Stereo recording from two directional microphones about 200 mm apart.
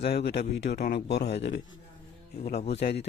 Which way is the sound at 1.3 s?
60° left (ahead or behind).